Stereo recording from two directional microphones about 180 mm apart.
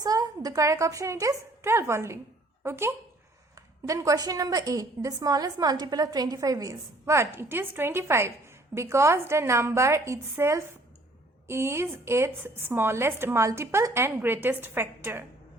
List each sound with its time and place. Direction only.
0.0 s a woman's voice: 20° right (ahead or behind)